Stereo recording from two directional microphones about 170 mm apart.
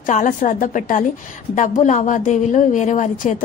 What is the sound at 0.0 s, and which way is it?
A woman's voice, 50° left (ahead or behind).